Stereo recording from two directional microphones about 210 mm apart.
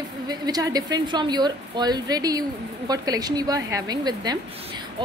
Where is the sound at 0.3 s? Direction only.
20° right (ahead or behind).